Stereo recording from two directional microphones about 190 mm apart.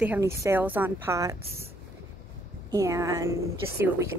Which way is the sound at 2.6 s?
15° right (ahead or behind).